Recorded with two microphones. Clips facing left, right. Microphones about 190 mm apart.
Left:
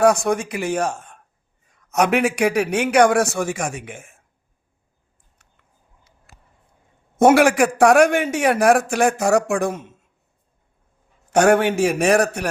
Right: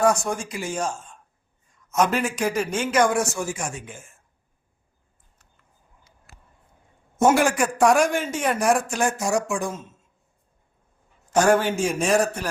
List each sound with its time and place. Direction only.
0.0 s a man's voice: 65° left (ahead or behind)
7.3 s a man's voice: 70° left (ahead or behind)
11.3 s a man's voice: 65° left (ahead or behind)